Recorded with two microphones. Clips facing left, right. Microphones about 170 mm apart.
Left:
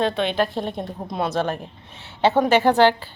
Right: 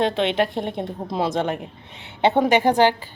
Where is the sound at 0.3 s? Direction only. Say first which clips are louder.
Right 1 dB; 20° right (ahead or behind).